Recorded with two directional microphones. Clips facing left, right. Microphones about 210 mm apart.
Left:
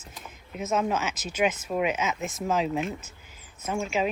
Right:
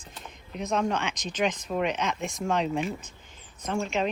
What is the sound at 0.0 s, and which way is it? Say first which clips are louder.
Speech: even; 5° left (ahead or behind).